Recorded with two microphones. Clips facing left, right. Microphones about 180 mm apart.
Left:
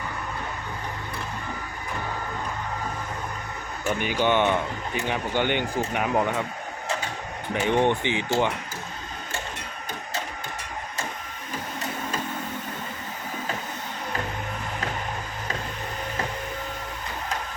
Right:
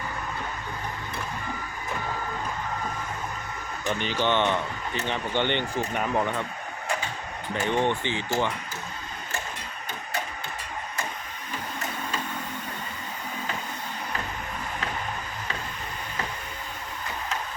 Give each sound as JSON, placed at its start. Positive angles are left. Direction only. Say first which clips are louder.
{"t": 3.8, "sound": "speech", "louder": "left 2 dB", "side_deg": 10}
{"t": 7.5, "sound": "speech", "louder": "left 3 dB", "side_deg": 15}